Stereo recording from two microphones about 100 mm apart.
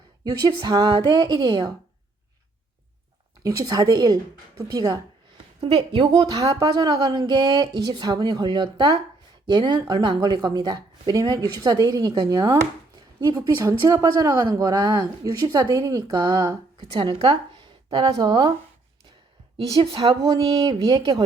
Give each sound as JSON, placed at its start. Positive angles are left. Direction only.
{"t": 0.3, "sound": "a woman's voice", "side_deg": -45}
{"t": 3.4, "sound": "speech", "side_deg": -35}
{"t": 5.7, "sound": "a woman's voice", "side_deg": -50}
{"t": 16.9, "sound": "speech", "side_deg": -55}
{"t": 19.5, "sound": "a woman's voice", "side_deg": -70}
{"t": 20.4, "sound": "a woman's voice", "side_deg": -55}